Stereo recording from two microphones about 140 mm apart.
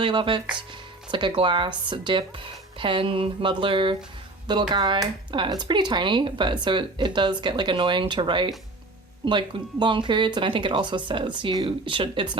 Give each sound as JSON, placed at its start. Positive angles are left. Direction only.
{"t": 0.0, "sound": "speech", "side_deg": -35}